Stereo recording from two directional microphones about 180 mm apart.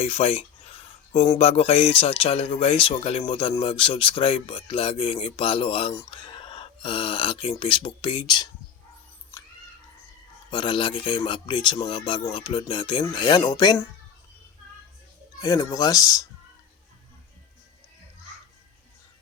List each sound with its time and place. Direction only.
0.0 s speech: 35° left (ahead or behind)
10.5 s speech: 25° left (ahead or behind)
15.4 s speech: 20° left (ahead or behind)